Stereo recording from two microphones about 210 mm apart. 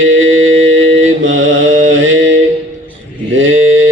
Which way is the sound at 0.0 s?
60° right (ahead or behind).